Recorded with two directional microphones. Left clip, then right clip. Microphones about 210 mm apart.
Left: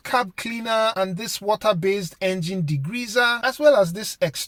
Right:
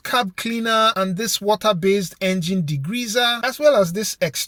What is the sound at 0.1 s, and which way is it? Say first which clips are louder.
Speech: right 2 dB; 35° right (ahead or behind).